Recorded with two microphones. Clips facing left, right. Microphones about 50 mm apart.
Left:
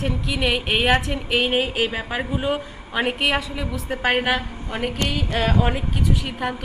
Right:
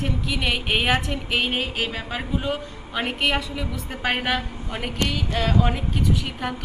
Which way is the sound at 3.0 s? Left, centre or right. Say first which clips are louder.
Left 2 dB; centre.